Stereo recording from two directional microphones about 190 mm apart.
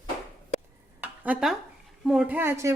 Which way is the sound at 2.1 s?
5° right (ahead or behind).